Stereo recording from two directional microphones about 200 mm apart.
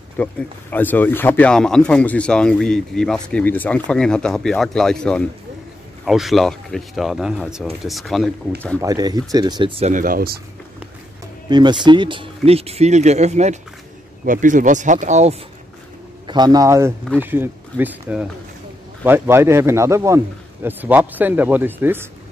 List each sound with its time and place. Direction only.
0.2 s speech: 10° left (ahead or behind)
8.7 s speech: 20° right (ahead or behind); by 10.3 s 45° right (ahead or behind)
11.4 s speech: 20° right (ahead or behind)
16.3 s speech: 20° right (ahead or behind)